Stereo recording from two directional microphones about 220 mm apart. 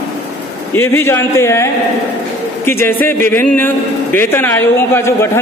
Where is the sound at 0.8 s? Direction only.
10° left (ahead or behind).